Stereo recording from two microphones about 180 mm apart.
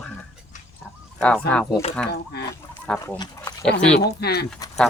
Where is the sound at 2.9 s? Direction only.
5° left (ahead or behind).